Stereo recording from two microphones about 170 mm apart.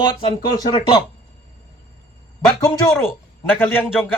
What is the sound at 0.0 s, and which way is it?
Speech, 30° left (ahead or behind).